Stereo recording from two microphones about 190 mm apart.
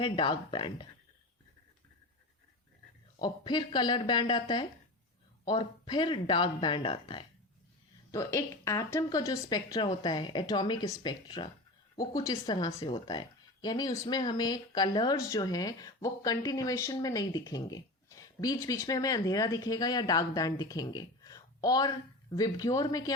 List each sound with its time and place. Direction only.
0.0 s speech: 25° left (ahead or behind)
3.2 s speech: 25° left (ahead or behind)
8.1 s speech: 15° left (ahead or behind)